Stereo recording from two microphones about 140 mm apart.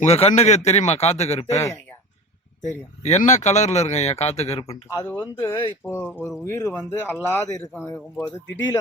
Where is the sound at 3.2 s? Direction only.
60° left (ahead or behind).